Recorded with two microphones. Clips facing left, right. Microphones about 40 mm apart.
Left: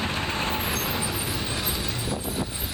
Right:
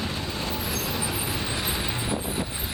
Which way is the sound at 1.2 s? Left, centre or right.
Centre.